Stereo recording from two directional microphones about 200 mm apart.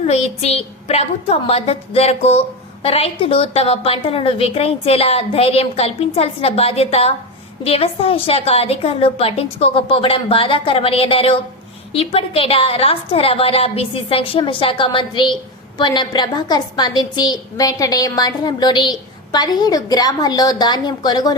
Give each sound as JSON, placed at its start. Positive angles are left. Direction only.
{"t": 0.0, "sound": "a woman's voice", "side_deg": 30}